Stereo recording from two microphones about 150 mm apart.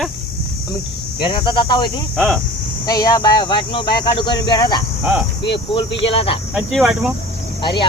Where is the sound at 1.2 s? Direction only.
30° left (ahead or behind).